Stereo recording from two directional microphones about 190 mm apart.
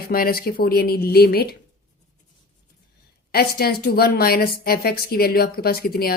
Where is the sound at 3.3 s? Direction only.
55° left (ahead or behind).